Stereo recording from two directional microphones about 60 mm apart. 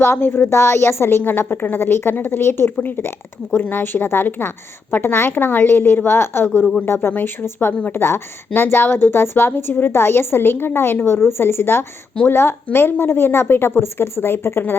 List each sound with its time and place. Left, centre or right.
0.0 s a woman's voice: left
7.7 s a woman's voice: left
7.9 s a woman's voice: left